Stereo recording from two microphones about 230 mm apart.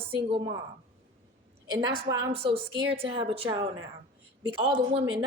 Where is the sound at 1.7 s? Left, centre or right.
Centre.